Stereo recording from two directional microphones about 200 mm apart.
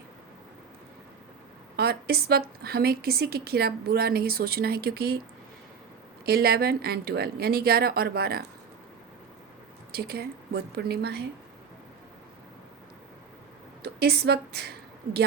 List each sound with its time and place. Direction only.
1.7 s a woman's voice: 50° right (ahead or behind)
6.2 s a woman's voice: 50° right (ahead or behind)
9.9 s a woman's voice: 50° right (ahead or behind)
13.8 s a woman's voice: 55° right (ahead or behind)